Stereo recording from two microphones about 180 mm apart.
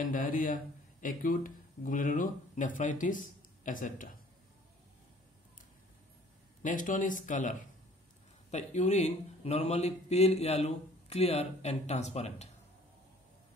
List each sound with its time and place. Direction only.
0.0 s speech: 50° left (ahead or behind)
6.6 s a man's voice: 45° left (ahead or behind)